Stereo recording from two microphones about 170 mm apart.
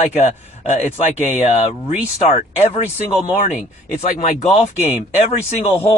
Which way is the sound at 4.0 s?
45° left (ahead or behind).